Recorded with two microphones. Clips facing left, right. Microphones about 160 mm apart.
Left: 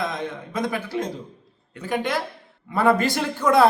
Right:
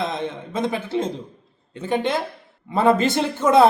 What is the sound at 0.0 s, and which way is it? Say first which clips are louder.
A man's voice: right 2 dB; 25° right (ahead or behind).